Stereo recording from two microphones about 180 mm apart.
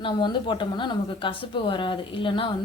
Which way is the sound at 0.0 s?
25° left (ahead or behind).